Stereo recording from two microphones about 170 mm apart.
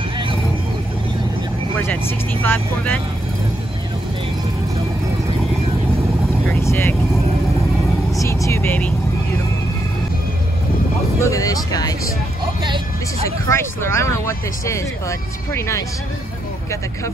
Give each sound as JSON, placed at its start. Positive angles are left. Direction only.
{"t": 1.8, "sound": "speech", "side_deg": 15}
{"t": 6.5, "sound": "speech", "side_deg": 15}
{"t": 8.2, "sound": "vehicle", "side_deg": 15}
{"t": 11.1, "sound": "speech", "side_deg": 20}
{"t": 13.5, "sound": "speech", "side_deg": 15}